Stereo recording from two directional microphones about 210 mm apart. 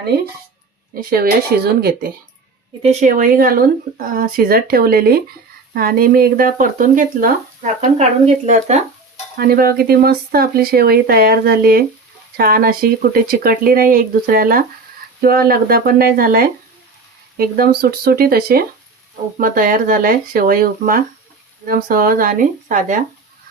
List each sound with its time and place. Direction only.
0.9 s speech: 45° right (ahead or behind)
2.8 s speech: 35° right (ahead or behind)
9.4 s speech: 45° right (ahead or behind)